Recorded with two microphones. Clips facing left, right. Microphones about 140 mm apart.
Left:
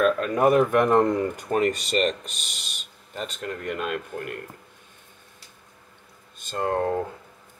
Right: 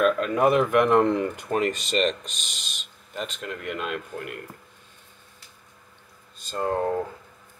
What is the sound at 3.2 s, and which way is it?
Speech, 40° left (ahead or behind).